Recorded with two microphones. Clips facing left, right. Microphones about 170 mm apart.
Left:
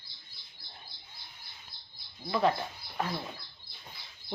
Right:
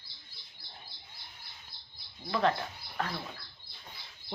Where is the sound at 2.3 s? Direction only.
5° left (ahead or behind).